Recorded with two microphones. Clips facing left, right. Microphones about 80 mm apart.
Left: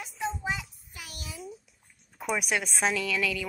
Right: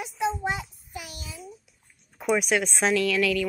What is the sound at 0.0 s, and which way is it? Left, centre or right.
Child singing, right.